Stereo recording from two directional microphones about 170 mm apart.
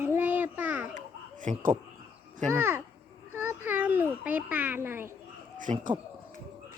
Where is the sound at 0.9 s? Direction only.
50° right (ahead or behind).